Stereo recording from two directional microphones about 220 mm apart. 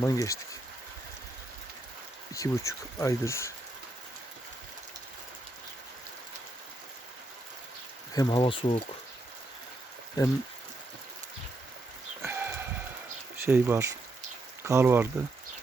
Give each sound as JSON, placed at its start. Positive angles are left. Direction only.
{"t": 0.0, "sound": "speech", "side_deg": 15}
{"t": 2.3, "sound": "speech", "side_deg": 15}
{"t": 8.1, "sound": "speech", "side_deg": 20}
{"t": 12.2, "sound": "livestock", "side_deg": -10}
{"t": 13.4, "sound": "speech", "side_deg": -10}